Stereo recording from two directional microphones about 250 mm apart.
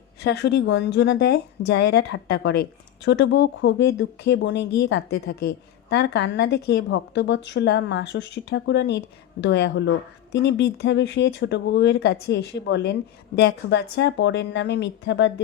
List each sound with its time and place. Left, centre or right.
0.2 s speech: left